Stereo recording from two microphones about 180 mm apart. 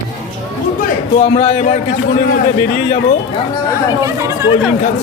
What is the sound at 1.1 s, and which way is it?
Speech, 35° left (ahead or behind).